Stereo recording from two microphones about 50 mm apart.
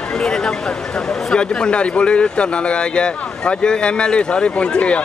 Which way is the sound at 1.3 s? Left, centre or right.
Centre.